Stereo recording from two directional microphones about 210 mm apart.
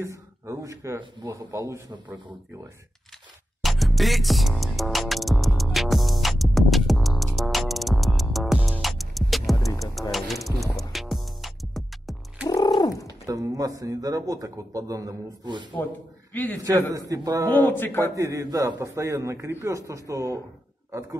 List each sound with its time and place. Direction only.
0.0 s a man's voice: 15° right (ahead or behind)
3.6 s music: centre (ahead or behind)
10.1 s a sound: centre (ahead or behind)
10.8 s music: centre (ahead or behind)
12.4 s a sound: 15° left (ahead or behind)
13.3 s a man's voice: 15° right (ahead or behind)
16.9 s a man's voice: 15° right (ahead or behind)
17.5 s speech: 10° left (ahead or behind)
18.1 s a man's voice: 15° right (ahead or behind)